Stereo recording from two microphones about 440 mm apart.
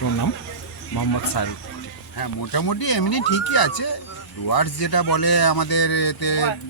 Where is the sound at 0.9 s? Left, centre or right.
Left.